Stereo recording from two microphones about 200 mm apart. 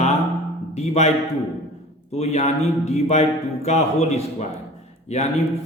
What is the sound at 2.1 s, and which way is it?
A man's voice, 35° left (ahead or behind).